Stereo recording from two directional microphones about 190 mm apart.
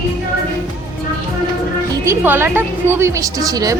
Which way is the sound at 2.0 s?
10° right (ahead or behind).